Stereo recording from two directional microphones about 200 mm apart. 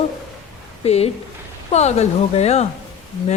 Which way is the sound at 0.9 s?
30° left (ahead or behind).